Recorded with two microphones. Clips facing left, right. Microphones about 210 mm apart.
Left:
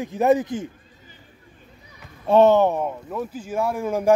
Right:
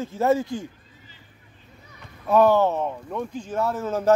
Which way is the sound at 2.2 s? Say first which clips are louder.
Left 3 dB; 25° left (ahead or behind).